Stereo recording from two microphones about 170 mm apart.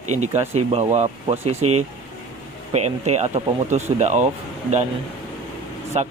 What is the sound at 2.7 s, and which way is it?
Speech, 40° right (ahead or behind).